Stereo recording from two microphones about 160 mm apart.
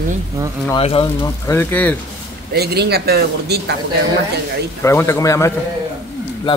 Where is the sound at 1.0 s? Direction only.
20° left (ahead or behind).